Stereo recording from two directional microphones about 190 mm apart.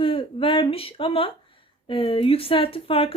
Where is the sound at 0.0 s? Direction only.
25° left (ahead or behind).